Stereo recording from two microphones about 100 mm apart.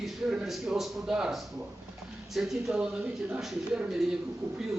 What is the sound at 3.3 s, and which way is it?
Speech, 15° right (ahead or behind).